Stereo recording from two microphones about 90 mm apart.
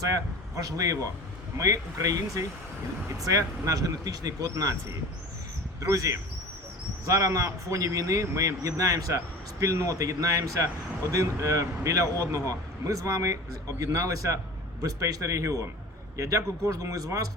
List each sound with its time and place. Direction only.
0.0 s a man's voice: 40° right (ahead or behind)
5.9 s a man's voice: 35° right (ahead or behind)